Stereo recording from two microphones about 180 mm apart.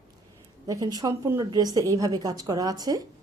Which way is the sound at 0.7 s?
20° right (ahead or behind).